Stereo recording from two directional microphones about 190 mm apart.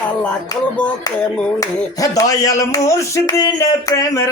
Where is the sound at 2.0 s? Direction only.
15° left (ahead or behind).